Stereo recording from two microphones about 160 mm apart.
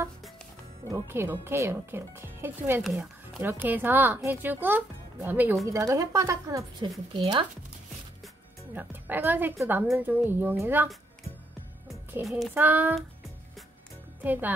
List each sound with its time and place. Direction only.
0.8 s speech: 15° right (ahead or behind)
2.8 s speech: 5° right (ahead or behind); by 6.9 s 20° right (ahead or behind)
7.2 s speech: 30° right (ahead or behind)
8.7 s speech: 10° right (ahead or behind)
12.5 s speech: 10° right (ahead or behind)
14.2 s speech: 10° right (ahead or behind)